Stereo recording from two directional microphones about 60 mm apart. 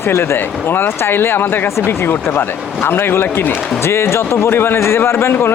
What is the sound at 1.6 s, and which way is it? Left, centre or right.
Speech, left.